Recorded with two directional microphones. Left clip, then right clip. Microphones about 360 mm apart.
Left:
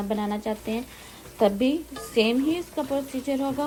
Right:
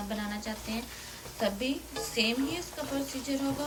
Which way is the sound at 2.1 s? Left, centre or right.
Centre.